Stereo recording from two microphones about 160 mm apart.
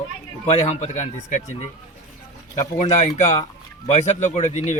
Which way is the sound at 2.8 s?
45° left (ahead or behind).